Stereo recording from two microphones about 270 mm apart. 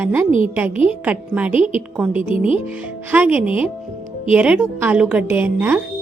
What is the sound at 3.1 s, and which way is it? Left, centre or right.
A woman's voice, centre.